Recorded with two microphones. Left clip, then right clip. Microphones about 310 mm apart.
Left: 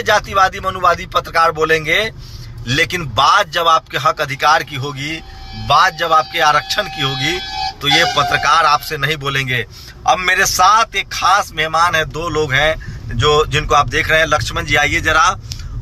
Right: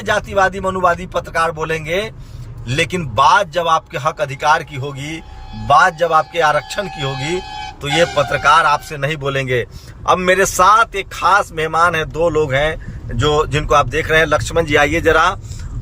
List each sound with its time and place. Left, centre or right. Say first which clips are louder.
0.0 s a man's voice: left 2 dB; centre